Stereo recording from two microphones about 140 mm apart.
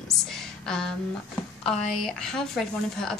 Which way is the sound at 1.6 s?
5° left (ahead or behind).